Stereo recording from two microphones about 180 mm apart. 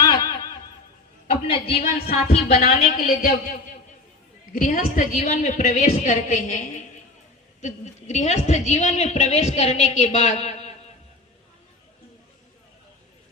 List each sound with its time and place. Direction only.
0.0 s snicker: 20° left (ahead or behind)
1.3 s a woman's voice: 30° left (ahead or behind)
2.6 s a woman's voice: 50° left (ahead or behind)